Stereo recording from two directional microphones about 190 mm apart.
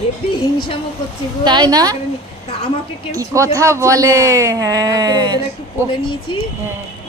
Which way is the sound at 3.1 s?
15° right (ahead or behind).